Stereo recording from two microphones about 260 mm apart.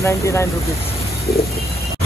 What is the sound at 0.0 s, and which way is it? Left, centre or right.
Speech, centre.